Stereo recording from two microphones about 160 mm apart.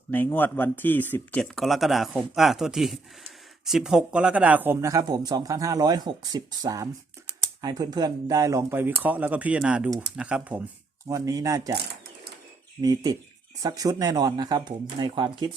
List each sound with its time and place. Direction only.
0.1 s speech: 10° left (ahead or behind); by 10.6 s 5° right (ahead or behind)
11.1 s speech: 20° right (ahead or behind)
12.8 s speech: 25° right (ahead or behind)